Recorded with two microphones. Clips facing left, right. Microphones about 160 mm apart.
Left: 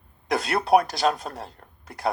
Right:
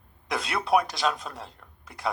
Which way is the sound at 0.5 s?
50° left (ahead or behind).